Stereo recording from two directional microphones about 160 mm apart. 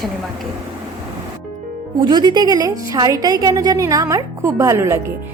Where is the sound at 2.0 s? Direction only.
25° right (ahead or behind).